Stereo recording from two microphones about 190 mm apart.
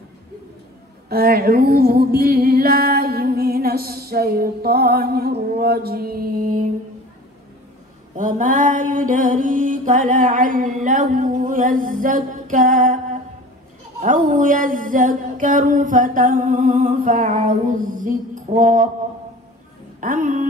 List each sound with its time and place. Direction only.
1.0 s music: 55° right (ahead or behind)
8.2 s mantra: 45° right (ahead or behind)
20.0 s mantra: 45° right (ahead or behind)